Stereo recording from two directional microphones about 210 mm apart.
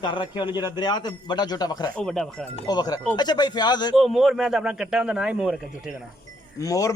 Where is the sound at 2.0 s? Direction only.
5° left (ahead or behind).